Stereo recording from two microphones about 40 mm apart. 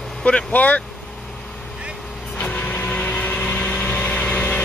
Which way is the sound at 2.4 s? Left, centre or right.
Left.